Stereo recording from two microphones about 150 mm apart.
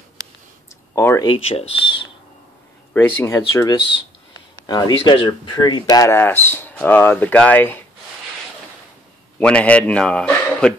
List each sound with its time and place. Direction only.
0.9 s speech: 15° left (ahead or behind)
1.2 s speech: 40° left (ahead or behind)
2.9 s speech: 15° left (ahead or behind)
9.4 s speech: 10° left (ahead or behind)